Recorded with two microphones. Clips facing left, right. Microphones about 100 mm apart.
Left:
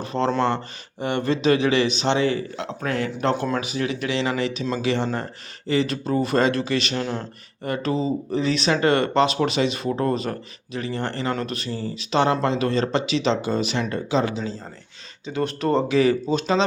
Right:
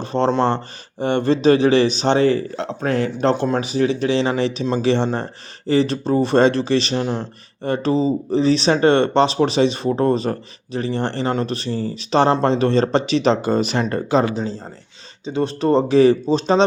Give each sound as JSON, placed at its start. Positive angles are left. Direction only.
{"t": 0.0, "sound": "speech", "side_deg": -30}
{"t": 15.2, "sound": "speech", "side_deg": -25}
{"t": 15.9, "sound": "speech", "side_deg": -35}